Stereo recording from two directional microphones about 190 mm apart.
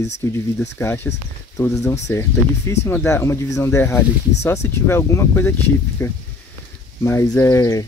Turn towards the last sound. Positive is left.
turn(degrees=15)  # may be behind; listen again after turning